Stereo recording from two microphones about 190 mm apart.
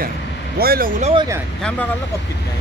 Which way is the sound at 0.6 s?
50° right (ahead or behind).